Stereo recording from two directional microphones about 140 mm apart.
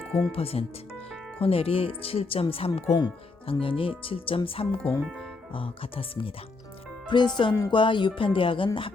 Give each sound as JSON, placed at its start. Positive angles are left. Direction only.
{"t": 0.3, "sound": "speech", "side_deg": 45}
{"t": 4.8, "sound": "speech", "side_deg": 10}
{"t": 5.5, "sound": "speech", "side_deg": 40}